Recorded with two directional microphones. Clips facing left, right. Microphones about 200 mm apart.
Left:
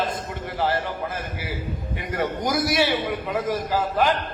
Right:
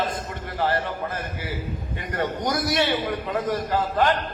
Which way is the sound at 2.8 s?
20° left (ahead or behind).